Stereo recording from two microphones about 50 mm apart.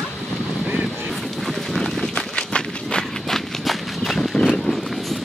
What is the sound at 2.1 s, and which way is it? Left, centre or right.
Run, centre.